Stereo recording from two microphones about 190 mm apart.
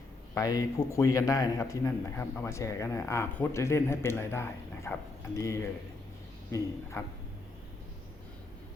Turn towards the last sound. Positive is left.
turn(degrees=15)  # may be behind; listen again after turning